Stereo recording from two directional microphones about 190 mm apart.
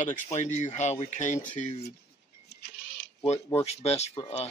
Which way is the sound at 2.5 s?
60° left (ahead or behind).